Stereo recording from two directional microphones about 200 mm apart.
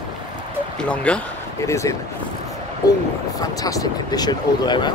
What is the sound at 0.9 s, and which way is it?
Speech, 5° left (ahead or behind).